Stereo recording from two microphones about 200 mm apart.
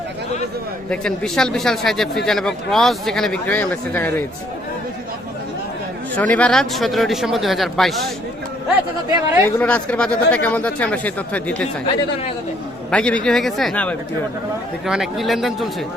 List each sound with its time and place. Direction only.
0.9 s speech: 5° left (ahead or behind)
6.1 s speech: 5° left (ahead or behind)
9.0 s speech: 15° right (ahead or behind)
9.6 s speech: 5° left (ahead or behind)
12.9 s speech: 5° left (ahead or behind)